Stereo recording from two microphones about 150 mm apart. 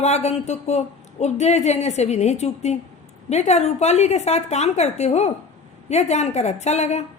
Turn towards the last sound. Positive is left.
turn(degrees=50)  # may be behind; listen again after turning